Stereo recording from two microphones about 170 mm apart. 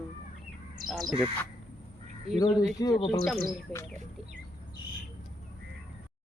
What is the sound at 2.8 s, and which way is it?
Speech, 20° left (ahead or behind).